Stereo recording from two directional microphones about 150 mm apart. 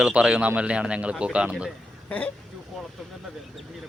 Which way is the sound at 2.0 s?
10° left (ahead or behind).